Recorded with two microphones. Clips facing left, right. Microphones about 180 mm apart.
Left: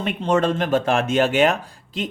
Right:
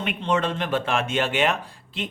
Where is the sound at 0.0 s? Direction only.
35° left (ahead or behind).